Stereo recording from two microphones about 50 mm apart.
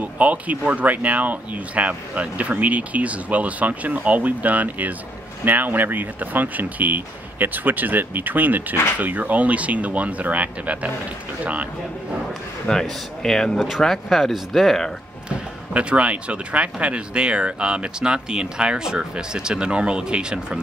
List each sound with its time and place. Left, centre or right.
0.0 s speech: right
12.6 s a man's voice: centre
13.6 s speech: centre
15.2 s speech: right